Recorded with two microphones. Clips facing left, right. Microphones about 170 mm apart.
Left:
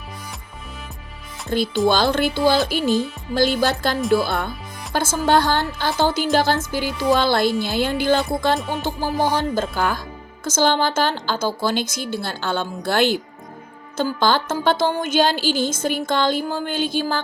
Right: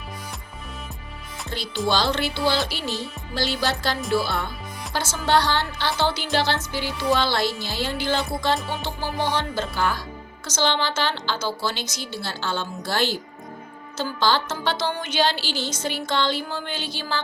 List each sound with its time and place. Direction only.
1.5 s speech: 50° left (ahead or behind)
4.9 s speech: 50° left (ahead or behind)